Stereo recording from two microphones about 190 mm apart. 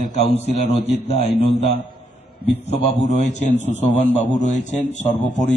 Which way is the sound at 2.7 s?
35° left (ahead or behind).